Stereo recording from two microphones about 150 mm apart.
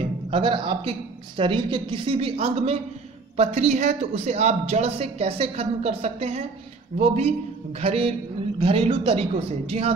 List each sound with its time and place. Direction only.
0.3 s a woman's voice: 35° right (ahead or behind)